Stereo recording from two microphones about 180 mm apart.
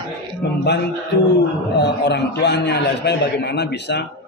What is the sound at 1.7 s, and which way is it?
A man's voice, 70° left (ahead or behind).